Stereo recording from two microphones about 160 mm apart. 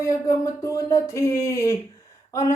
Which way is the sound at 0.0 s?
20° left (ahead or behind).